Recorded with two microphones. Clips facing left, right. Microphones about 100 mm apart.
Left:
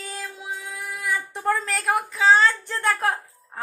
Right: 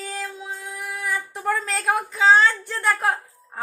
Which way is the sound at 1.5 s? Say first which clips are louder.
Right 1 dB; 20° right (ahead or behind).